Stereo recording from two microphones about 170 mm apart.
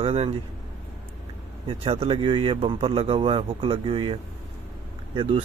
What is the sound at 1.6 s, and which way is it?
Speech, 35° right (ahead or behind).